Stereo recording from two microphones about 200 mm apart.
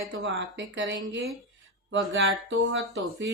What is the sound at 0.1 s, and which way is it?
Speech, 65° right (ahead or behind).